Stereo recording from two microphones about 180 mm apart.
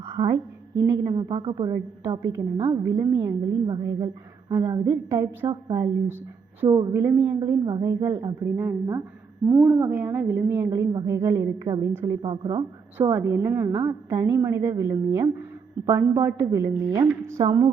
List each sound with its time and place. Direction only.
0.1 s a woman's voice: 20° right (ahead or behind)